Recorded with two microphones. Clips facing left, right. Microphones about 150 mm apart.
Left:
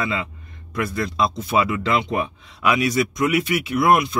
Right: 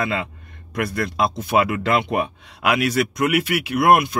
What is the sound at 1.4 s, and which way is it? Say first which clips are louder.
Speech: right 1 dB; 60° right (ahead or behind).